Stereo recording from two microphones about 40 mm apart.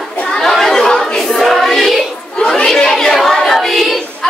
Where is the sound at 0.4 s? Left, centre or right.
Centre.